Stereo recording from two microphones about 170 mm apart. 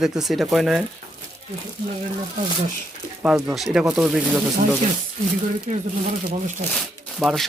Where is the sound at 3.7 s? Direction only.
Centre (ahead or behind).